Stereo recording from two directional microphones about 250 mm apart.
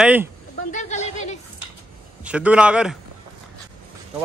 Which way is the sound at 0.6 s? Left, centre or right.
Left.